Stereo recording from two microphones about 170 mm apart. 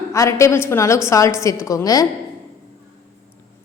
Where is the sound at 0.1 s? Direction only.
15° left (ahead or behind).